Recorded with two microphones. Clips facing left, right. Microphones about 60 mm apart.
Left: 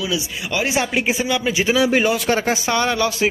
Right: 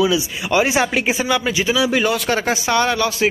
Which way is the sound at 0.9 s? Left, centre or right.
Centre.